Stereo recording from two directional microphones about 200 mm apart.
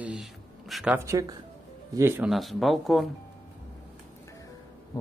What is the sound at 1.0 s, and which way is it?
Speech, 15° right (ahead or behind).